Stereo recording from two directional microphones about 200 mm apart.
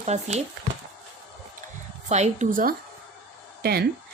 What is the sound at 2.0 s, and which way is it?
A woman's voice, 35° right (ahead or behind).